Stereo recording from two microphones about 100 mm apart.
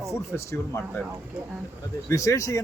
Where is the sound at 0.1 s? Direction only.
30° left (ahead or behind).